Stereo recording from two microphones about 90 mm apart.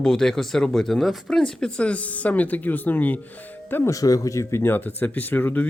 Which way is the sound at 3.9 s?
40° left (ahead or behind).